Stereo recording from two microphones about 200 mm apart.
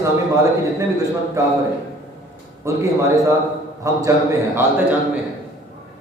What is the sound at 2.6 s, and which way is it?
A man's voice, 15° right (ahead or behind).